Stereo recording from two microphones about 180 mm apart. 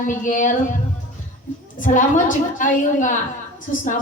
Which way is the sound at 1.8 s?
45° left (ahead or behind).